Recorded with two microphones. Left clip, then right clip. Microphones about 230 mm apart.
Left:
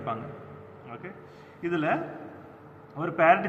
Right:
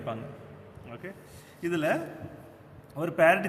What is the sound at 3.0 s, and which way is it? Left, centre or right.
Speech, right.